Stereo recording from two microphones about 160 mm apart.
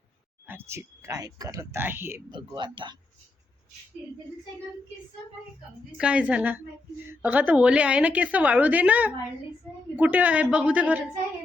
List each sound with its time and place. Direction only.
0.4 s speech: 15° right (ahead or behind)
2.3 s speech: 25° right (ahead or behind)
6.0 s a woman's voice: 5° right (ahead or behind)